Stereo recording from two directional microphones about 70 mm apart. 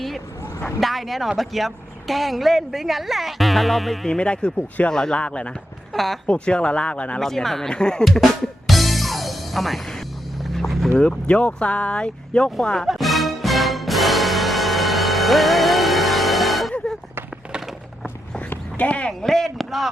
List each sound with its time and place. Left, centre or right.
0.8 s a woman's voice: centre
4.2 s speech: centre
5.9 s a woman's voice: centre
6.2 s speech: centre
7.2 s speech: centre
8.0 s music: centre
10.9 s speech: centre
12.9 s music: centre
18.5 s a sound: left
19.2 s a woman's voice: centre